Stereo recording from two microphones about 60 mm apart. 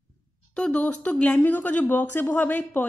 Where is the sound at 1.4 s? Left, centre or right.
Left.